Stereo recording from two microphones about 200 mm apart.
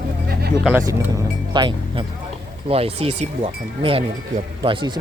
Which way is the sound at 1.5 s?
25° right (ahead or behind).